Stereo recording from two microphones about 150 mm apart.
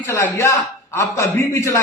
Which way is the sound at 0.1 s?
15° left (ahead or behind).